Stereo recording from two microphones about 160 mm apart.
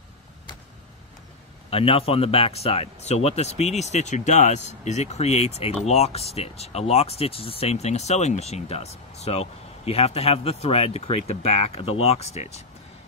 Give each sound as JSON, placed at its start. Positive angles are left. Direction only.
{"t": 1.7, "sound": "speech", "side_deg": 35}